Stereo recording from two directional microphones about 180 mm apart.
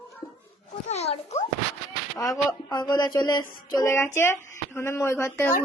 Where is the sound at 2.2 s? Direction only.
20° left (ahead or behind).